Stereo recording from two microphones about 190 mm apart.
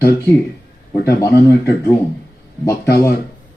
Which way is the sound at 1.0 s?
15° left (ahead or behind).